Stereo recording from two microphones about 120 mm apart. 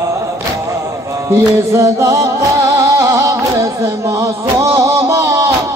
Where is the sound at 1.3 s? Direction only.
25° right (ahead or behind).